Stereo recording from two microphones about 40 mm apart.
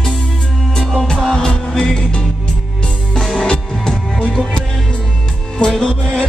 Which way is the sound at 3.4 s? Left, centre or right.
Centre.